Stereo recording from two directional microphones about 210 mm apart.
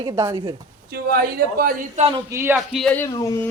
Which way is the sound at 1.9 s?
25° right (ahead or behind).